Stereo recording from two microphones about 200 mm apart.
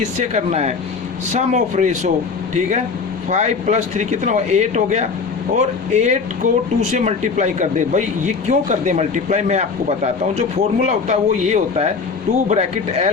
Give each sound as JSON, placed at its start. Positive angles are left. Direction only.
{"t": 0.0, "sound": "speech", "side_deg": -35}